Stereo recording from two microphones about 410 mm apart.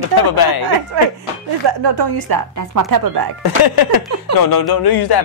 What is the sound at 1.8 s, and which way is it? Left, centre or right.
A woman's voice, right.